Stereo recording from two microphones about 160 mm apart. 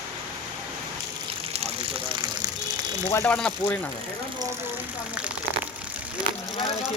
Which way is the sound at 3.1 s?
15° left (ahead or behind).